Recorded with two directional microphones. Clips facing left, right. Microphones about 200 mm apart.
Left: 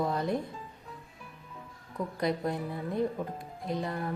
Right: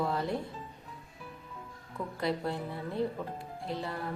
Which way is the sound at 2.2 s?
15° left (ahead or behind).